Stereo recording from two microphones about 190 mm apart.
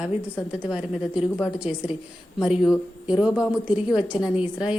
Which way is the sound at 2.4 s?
Centre (ahead or behind).